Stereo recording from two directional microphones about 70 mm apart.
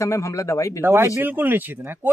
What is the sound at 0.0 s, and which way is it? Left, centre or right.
Speech, left.